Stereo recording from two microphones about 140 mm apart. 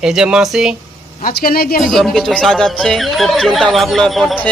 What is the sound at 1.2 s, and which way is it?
Speech, 90° left.